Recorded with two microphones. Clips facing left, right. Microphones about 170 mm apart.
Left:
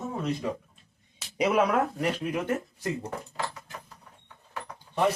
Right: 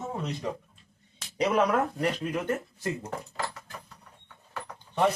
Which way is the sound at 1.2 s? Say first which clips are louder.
Left 1 dB; 10° left (ahead or behind).